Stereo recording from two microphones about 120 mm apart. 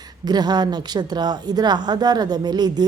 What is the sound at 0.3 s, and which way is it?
A woman's voice, 35° right (ahead or behind).